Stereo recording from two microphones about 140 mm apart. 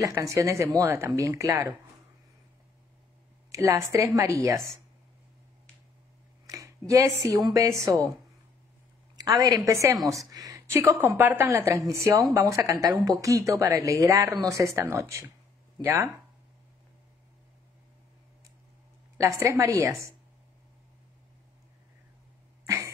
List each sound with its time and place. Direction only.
0.0 s speech: 25° right (ahead or behind)
3.5 s speech: 20° right (ahead or behind)
6.4 s speech: 25° right (ahead or behind)
9.1 s a sound: 25° right (ahead or behind)
9.7 s speech: 20° right (ahead or behind)
10.8 s a woman's voice: 15° right (ahead or behind)
19.1 s speech: 20° right (ahead or behind)